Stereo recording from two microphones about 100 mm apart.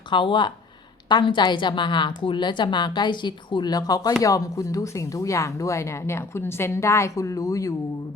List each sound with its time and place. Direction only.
0.1 s a woman's voice: 55° left (ahead or behind); by 7.7 s 35° left (ahead or behind)